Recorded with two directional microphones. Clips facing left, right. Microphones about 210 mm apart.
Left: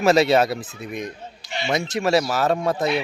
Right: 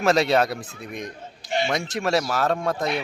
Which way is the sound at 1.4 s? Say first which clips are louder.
Right 3 dB; 50° right (ahead or behind).